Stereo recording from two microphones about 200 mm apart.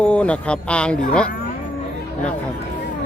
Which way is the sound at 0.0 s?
5° left (ahead or behind).